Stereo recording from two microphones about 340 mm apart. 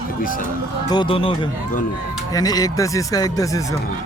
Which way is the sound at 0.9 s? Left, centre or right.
Centre.